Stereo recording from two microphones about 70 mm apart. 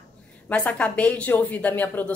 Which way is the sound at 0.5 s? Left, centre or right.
Centre.